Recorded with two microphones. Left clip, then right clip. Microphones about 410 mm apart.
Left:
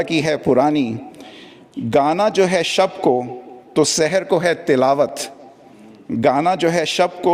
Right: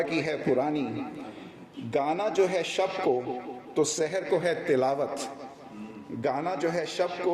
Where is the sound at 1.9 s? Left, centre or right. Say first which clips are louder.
Left 12 dB; left.